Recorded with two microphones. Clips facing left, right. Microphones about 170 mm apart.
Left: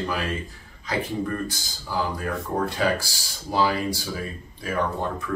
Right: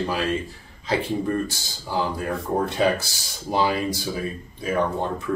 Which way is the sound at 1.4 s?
25° right (ahead or behind).